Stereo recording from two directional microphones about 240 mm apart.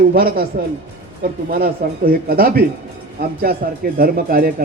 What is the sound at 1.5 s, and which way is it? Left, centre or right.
Speech, right.